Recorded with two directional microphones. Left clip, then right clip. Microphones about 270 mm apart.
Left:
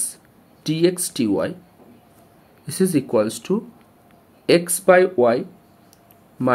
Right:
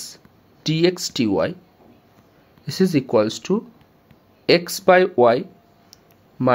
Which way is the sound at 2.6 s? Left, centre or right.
Centre.